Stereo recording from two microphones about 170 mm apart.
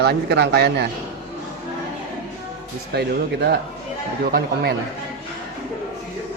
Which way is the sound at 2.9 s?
75° right (ahead or behind).